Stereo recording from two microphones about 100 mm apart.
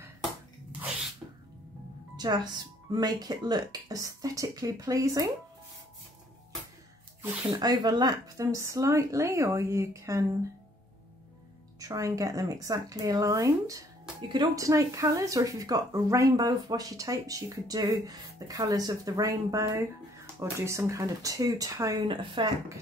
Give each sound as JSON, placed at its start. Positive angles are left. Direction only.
{"t": 2.1, "sound": "music", "side_deg": -45}
{"t": 2.9, "sound": "speech", "side_deg": -40}
{"t": 7.5, "sound": "speech", "side_deg": -40}
{"t": 11.8, "sound": "speech", "side_deg": -35}
{"t": 22.0, "sound": "a woman's voice", "side_deg": -55}